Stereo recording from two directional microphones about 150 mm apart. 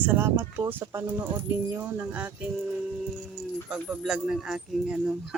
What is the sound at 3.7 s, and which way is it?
Speech, 5° right (ahead or behind).